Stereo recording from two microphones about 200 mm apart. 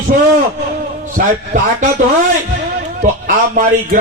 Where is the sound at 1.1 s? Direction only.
35° right (ahead or behind).